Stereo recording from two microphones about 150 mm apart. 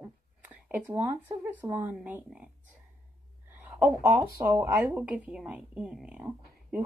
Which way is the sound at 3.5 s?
10° right (ahead or behind).